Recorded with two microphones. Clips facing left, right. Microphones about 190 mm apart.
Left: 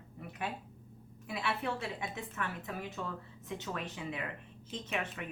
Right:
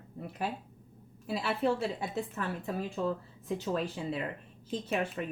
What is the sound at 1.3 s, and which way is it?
Speech, 35° right (ahead or behind).